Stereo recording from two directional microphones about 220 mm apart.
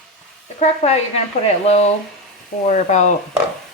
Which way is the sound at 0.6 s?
30° left (ahead or behind).